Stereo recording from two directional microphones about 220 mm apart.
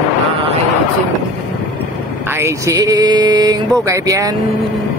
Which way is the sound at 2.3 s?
15° right (ahead or behind).